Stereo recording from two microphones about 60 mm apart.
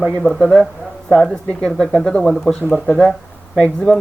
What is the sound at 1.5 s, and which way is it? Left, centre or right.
Speech, centre.